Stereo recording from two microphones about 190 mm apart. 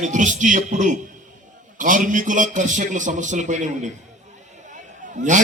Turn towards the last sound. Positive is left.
turn(degrees=-40)  # may be behind; listen again after turning